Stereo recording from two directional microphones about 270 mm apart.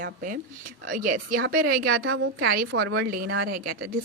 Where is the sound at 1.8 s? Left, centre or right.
Right.